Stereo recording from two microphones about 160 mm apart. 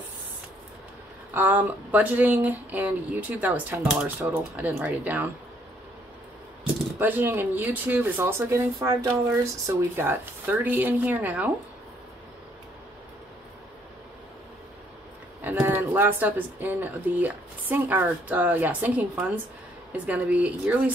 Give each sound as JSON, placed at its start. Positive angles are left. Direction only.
{"t": 1.3, "sound": "speech", "side_deg": -10}
{"t": 7.0, "sound": "speech", "side_deg": -10}
{"t": 15.4, "sound": "speech", "side_deg": -15}